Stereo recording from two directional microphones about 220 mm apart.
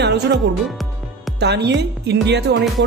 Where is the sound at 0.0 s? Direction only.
50° right (ahead or behind).